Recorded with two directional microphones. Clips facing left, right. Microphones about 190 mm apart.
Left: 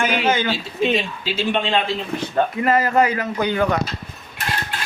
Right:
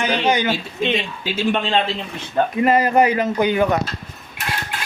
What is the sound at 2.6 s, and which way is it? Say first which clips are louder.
Speech: right 3 dB; 20° right (ahead or behind).